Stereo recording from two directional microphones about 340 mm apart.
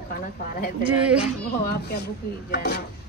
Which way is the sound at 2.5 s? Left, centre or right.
Left.